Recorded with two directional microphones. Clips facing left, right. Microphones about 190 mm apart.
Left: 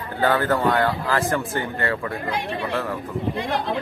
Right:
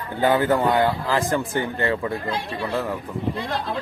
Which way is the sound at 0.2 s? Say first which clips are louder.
Right 1 dB; 15° right (ahead or behind).